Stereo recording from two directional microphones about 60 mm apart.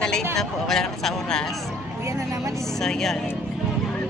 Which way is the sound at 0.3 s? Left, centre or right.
Centre.